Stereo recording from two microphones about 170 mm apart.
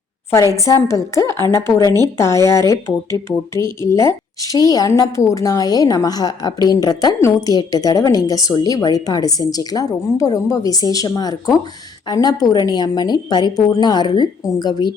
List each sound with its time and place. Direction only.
0.5 s a woman's voice: 20° left (ahead or behind)